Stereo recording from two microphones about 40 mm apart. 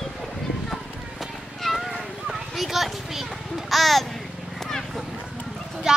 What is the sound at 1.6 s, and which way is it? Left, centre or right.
Children playing, centre.